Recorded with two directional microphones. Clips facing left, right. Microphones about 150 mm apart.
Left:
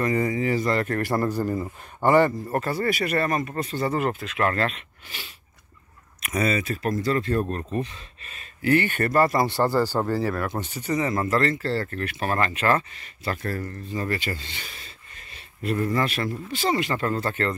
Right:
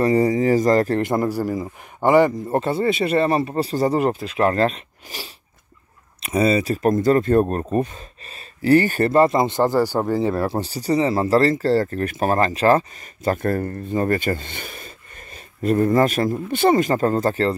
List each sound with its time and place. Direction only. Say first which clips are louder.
0.0 s speech: right 7 dB; 35° right (ahead or behind)
0.9 s a man's voice: right 4 dB; 20° right (ahead or behind)
10.3 s speech: right 6 dB; 30° right (ahead or behind)